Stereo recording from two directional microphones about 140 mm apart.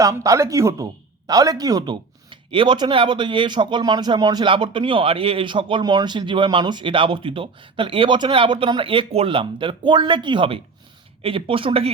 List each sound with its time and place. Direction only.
0.0 s speech: 25° right (ahead or behind); by 11.9 s 40° right (ahead or behind)